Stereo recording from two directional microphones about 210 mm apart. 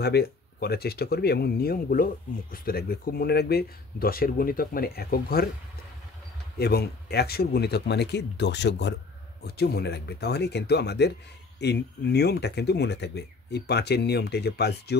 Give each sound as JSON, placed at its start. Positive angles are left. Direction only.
{"t": 0.0, "sound": "speech", "side_deg": 50}
{"t": 6.6, "sound": "speech", "side_deg": 50}